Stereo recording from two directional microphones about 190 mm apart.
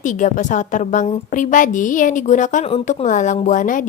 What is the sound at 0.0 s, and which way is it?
A woman's voice, 40° left (ahead or behind).